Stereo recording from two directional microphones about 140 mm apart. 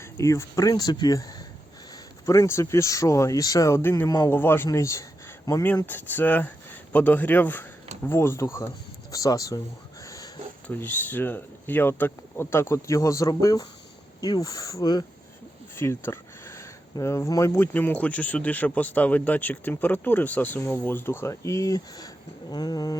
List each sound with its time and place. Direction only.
0.0 s speech: 20° left (ahead or behind)
10.0 s a sound: 25° left (ahead or behind)
10.7 s speech: 15° left (ahead or behind)